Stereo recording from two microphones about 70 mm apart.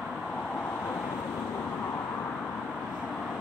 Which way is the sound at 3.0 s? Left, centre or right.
Centre.